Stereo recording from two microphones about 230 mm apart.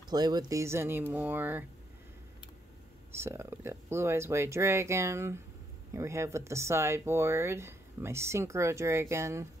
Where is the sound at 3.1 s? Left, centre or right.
Centre.